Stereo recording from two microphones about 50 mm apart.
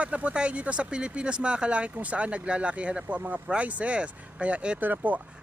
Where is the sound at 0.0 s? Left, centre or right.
Right.